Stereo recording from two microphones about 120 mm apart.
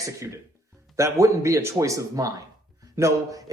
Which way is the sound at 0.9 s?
25° right (ahead or behind).